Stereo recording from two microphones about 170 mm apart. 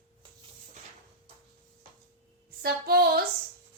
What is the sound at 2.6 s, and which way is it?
Speech, 65° right (ahead or behind).